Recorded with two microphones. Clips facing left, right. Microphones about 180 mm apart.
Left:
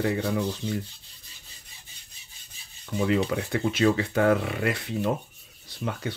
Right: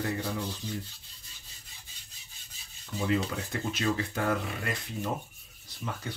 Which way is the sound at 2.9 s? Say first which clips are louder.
Left 5 dB; 70° left (ahead or behind).